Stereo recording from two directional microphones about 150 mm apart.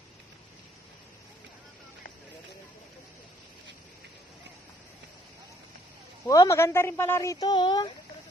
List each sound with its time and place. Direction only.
6.2 s a woman's voice: 20° left (ahead or behind)
7.4 s a woman's voice: 30° left (ahead or behind)